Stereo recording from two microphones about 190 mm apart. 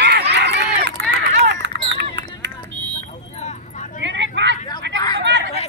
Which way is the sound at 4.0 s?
70° right (ahead or behind).